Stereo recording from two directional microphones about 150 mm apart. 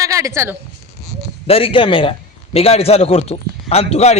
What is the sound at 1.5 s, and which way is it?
A man's voice, 40° left (ahead or behind).